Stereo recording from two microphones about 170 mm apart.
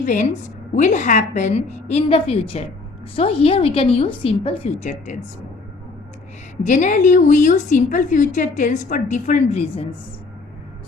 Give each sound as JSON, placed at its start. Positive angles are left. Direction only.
{"t": 0.0, "sound": "a woman's voice", "side_deg": 45}
{"t": 6.6, "sound": "a woman's voice", "side_deg": 45}